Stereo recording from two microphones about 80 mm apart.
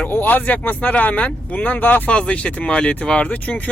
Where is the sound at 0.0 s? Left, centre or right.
Left.